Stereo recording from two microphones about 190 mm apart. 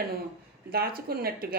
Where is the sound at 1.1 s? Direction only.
50° right (ahead or behind).